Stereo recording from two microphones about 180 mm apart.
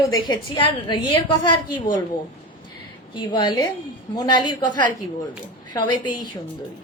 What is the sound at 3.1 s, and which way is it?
A woman's voice, 25° left (ahead or behind).